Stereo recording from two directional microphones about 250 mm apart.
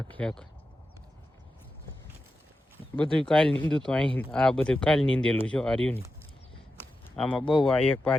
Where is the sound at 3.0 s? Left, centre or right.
Centre.